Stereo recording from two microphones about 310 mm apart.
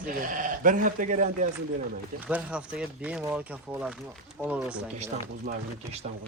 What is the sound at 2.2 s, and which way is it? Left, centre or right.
Speech, centre.